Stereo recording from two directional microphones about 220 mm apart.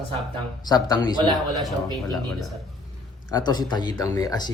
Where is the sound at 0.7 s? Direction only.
20° left (ahead or behind).